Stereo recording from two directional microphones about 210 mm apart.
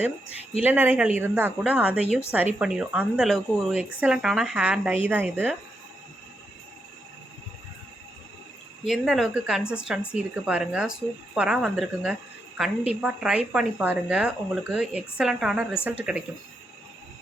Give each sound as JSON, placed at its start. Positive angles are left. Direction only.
{"t": 0.6, "sound": "a woman's voice", "side_deg": -10}
{"t": 8.8, "sound": "a woman's voice", "side_deg": 0}